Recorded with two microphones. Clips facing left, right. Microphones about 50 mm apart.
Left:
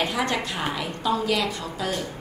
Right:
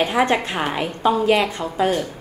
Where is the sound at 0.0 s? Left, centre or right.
Right.